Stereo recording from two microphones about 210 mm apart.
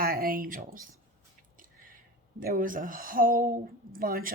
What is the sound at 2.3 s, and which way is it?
Speech, 40° right (ahead or behind).